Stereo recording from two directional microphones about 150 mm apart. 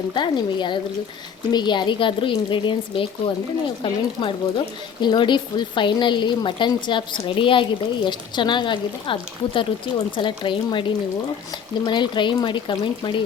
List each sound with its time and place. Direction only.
0.1 s a woman's voice: 30° left (ahead or behind)